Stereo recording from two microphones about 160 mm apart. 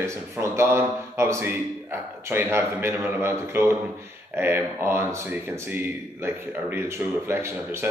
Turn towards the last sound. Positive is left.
turn(degrees=-15)  # may be behind; listen again after turning